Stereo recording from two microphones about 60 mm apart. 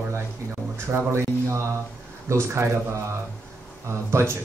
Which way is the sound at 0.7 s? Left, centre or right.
Right.